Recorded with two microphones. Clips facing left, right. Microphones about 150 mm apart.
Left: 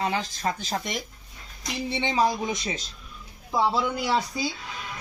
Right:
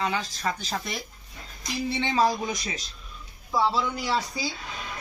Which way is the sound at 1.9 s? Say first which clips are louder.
Even; 15° left (ahead or behind).